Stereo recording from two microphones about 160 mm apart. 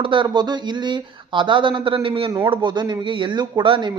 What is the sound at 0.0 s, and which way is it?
Speech, 30° right (ahead or behind).